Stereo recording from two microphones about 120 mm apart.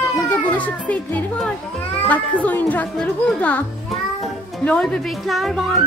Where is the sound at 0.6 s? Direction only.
10° left (ahead or behind).